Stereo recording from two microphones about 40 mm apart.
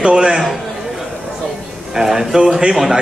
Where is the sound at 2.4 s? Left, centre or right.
Right.